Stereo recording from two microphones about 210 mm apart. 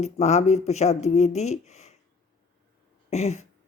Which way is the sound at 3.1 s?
30° left (ahead or behind).